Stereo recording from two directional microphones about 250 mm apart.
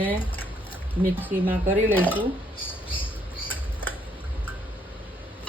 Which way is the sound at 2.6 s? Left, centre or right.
Left.